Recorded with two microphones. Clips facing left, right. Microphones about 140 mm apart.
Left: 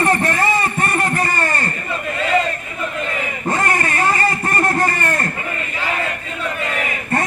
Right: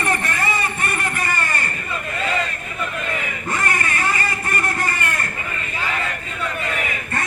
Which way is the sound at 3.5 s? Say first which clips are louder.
Left 5 dB; 35° left (ahead or behind).